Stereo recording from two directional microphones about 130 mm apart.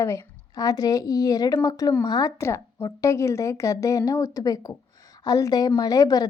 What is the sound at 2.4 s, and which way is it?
A woman's voice, 20° left (ahead or behind).